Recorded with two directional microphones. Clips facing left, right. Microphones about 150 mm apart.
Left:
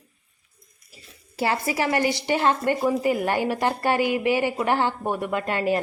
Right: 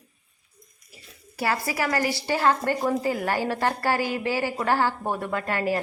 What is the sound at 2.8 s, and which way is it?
Speech, 5° left (ahead or behind).